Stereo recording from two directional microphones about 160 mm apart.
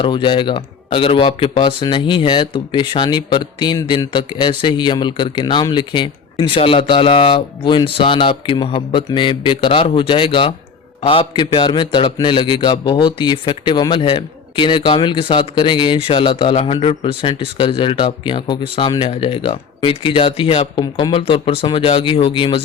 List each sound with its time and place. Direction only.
0.0 s a man's voice: 30° left (ahead or behind)